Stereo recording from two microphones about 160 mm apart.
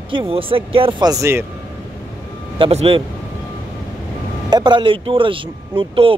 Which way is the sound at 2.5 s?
35° right (ahead or behind).